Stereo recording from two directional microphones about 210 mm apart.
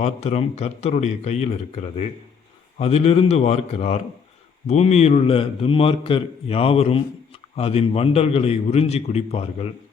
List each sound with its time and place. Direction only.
0.0 s a man's voice: 30° left (ahead or behind)